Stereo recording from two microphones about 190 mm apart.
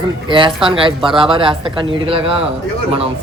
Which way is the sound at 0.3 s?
25° right (ahead or behind).